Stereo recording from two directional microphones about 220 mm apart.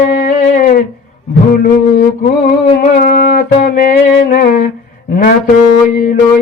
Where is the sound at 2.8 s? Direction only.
40° left (ahead or behind).